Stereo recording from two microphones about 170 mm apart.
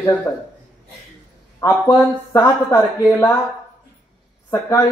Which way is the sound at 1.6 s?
20° left (ahead or behind).